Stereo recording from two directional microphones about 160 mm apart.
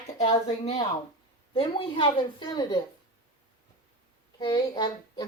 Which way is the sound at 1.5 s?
30° left (ahead or behind).